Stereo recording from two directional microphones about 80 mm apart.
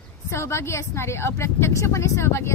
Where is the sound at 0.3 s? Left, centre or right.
Left.